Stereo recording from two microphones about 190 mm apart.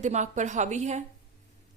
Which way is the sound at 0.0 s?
40° right (ahead or behind).